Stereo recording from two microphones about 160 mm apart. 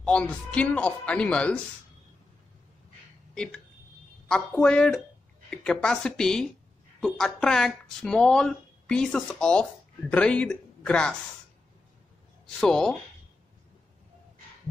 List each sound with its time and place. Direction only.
0.0 s speech: 5° left (ahead or behind)
4.3 s speech: 5° left (ahead or behind)
12.5 s speech: 5° left (ahead or behind)